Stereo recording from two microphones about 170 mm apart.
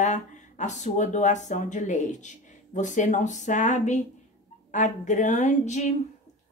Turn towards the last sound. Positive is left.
turn(degrees=45)  # may be behind; listen again after turning